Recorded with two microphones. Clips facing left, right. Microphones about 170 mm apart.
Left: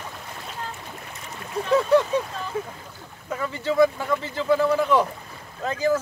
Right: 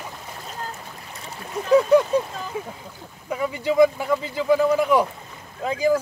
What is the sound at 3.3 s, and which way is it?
Speech, 15° right (ahead or behind).